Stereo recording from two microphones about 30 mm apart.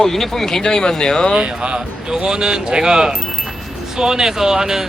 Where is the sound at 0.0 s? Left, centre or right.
Centre; by 1.3 s left.